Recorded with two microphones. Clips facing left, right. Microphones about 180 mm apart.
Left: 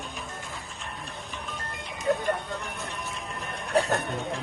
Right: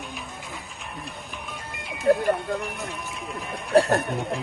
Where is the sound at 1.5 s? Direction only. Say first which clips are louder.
Right 1 dB; centre (ahead or behind).